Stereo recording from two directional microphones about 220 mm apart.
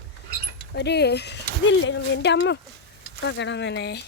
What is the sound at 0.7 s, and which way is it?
Speech, 50° left (ahead or behind).